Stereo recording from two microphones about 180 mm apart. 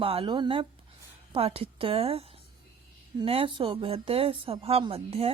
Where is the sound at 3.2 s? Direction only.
30° right (ahead or behind).